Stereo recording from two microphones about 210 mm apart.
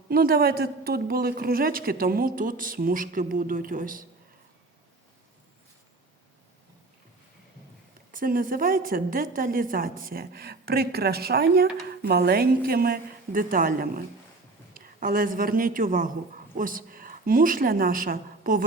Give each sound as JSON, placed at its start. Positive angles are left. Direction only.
{"t": 0.1, "sound": "a woman's voice", "side_deg": -45}
{"t": 8.1, "sound": "a woman's voice", "side_deg": -40}